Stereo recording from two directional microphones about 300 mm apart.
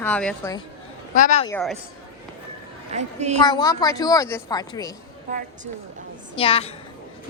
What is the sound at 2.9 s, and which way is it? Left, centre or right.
Speech, right.